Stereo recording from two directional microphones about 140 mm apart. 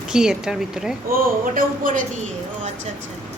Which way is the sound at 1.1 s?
85° right.